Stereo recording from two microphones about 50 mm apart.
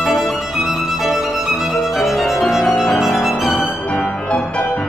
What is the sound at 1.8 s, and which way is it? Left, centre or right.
Violin, centre.